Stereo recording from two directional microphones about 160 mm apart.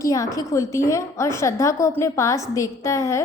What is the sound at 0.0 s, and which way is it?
A woman's voice, 20° left (ahead or behind).